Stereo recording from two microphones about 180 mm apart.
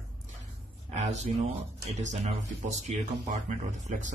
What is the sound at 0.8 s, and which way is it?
Speech, 40° right (ahead or behind).